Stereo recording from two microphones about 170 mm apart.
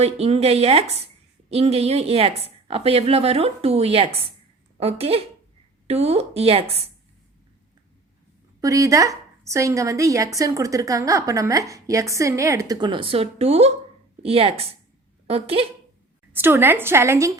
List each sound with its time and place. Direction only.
0.0 s a woman's voice: 40° right (ahead or behind)
8.6 s a woman's voice: 20° right (ahead or behind)
16.3 s a woman's voice: 15° right (ahead or behind)